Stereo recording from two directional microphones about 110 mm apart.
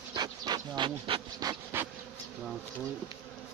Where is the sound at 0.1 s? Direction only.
40° right (ahead or behind).